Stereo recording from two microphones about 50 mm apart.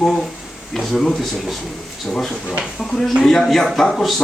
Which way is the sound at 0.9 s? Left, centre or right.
Centre.